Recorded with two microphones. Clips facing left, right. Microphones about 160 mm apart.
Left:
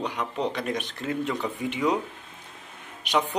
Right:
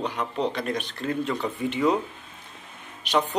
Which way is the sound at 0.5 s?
15° left (ahead or behind).